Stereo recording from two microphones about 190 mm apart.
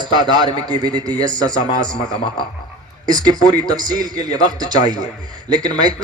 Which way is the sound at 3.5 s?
20° right (ahead or behind).